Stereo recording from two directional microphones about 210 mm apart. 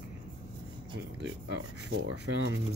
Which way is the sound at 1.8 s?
50° right (ahead or behind).